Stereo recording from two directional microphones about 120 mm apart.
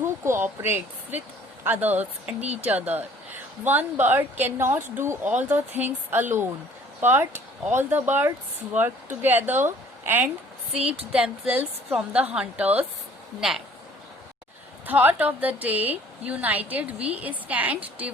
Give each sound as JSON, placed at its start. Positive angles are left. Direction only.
{"t": 0.0, "sound": "a woman's voice", "side_deg": -20}
{"t": 2.4, "sound": "speech", "side_deg": -60}
{"t": 2.6, "sound": "a woman's voice", "side_deg": -15}
{"t": 14.8, "sound": "a woman's voice", "side_deg": -15}